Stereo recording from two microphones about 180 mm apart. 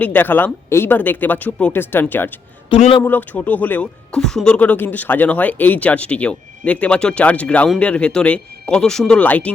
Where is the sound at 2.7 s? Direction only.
30° left (ahead or behind).